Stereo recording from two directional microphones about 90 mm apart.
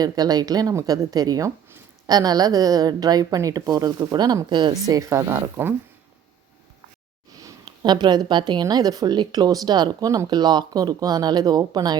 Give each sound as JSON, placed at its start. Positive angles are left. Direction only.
{"t": 0.0, "sound": "a woman's voice", "side_deg": -45}
{"t": 4.9, "sound": "speech", "side_deg": -35}
{"t": 7.3, "sound": "a woman's voice", "side_deg": -45}